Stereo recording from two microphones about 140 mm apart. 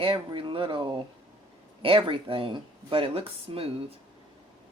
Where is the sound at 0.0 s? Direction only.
40° right (ahead or behind).